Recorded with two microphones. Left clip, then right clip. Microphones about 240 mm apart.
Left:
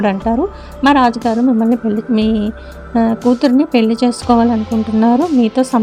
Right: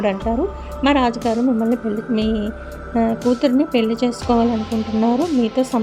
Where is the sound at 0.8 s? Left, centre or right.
Left.